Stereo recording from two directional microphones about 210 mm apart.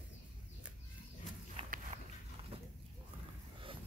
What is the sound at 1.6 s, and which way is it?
Walk, 40° right (ahead or behind).